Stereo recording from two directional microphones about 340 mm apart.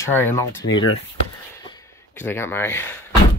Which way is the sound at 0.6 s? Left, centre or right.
Left.